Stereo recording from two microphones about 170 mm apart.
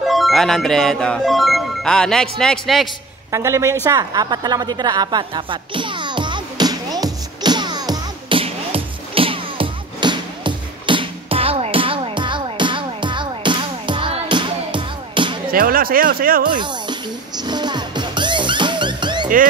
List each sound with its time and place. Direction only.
0.0 s speech: centre (ahead or behind)
3.3 s speech: 15° right (ahead or behind)
3.8 s a sound: 20° right (ahead or behind)
15.5 s speech: 60° right (ahead or behind)
16.4 s speech: 25° right (ahead or behind)
17.5 s music: 25° right (ahead or behind)